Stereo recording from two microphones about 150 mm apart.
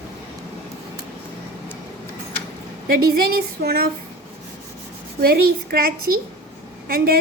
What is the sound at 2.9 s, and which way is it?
Speech, 90° right.